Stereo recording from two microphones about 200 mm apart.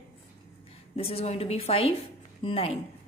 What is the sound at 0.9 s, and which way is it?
A woman's voice, 30° left (ahead or behind).